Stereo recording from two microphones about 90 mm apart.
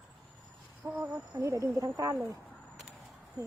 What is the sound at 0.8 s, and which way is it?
Speech, 35° right (ahead or behind).